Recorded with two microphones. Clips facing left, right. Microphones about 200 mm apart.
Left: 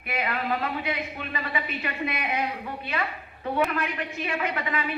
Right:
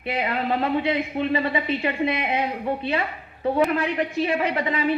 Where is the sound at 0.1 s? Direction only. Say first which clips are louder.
Right 4 dB; 25° right (ahead or behind).